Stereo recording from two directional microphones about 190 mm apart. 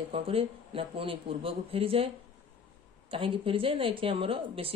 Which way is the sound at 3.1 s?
30° right (ahead or behind).